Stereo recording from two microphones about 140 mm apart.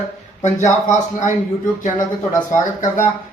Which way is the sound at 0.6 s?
60° left (ahead or behind).